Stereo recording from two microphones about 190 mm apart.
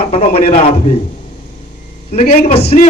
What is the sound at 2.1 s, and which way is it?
Speech, 35° left (ahead or behind).